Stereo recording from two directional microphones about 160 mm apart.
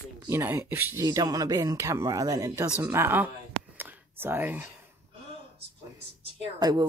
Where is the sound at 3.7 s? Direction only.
10° right (ahead or behind).